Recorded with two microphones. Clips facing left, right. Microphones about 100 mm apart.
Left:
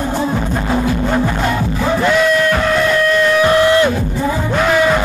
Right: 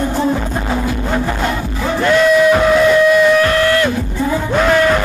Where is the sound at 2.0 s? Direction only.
5° left (ahead or behind).